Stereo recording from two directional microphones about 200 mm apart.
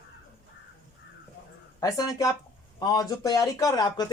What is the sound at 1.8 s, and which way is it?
Speech, 15° left (ahead or behind).